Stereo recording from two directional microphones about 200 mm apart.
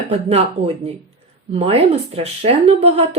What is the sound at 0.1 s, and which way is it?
A woman's voice, 30° right (ahead or behind).